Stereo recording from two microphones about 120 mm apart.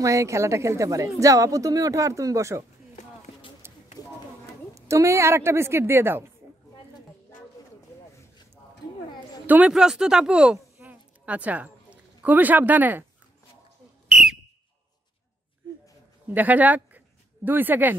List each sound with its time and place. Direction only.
0.0 s a woman's voice: 25° right (ahead or behind)
3.6 s a sound: 20° right (ahead or behind)
4.7 s a woman's voice: 25° right (ahead or behind)
9.5 s speech: 10° right (ahead or behind)
10.8 s a sound: 15° right (ahead or behind)
16.3 s speech: 15° right (ahead or behind)